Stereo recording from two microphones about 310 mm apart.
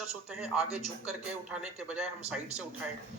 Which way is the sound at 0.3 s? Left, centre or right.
Centre.